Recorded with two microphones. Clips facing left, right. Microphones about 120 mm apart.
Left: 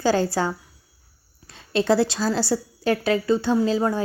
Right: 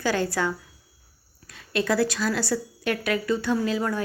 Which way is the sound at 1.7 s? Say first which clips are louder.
Left 4 dB; 30° left (ahead or behind).